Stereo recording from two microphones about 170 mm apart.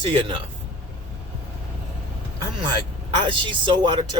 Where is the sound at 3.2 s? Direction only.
30° right (ahead or behind).